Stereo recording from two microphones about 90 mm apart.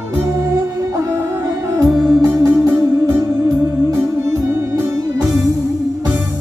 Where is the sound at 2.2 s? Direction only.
30° right (ahead or behind).